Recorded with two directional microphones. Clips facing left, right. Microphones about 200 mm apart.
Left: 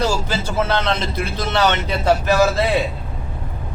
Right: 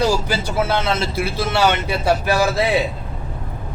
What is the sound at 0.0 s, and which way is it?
Speech, 15° right (ahead or behind).